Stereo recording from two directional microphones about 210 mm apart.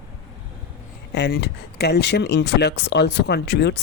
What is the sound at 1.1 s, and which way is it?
Speech, 55° left (ahead or behind).